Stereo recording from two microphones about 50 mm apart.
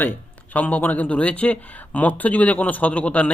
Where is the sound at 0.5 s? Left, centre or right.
Left.